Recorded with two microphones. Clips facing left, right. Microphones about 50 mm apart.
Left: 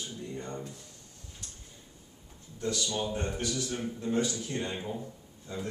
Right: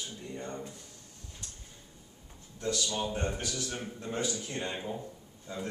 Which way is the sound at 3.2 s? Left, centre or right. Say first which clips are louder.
Left 1 dB; centre.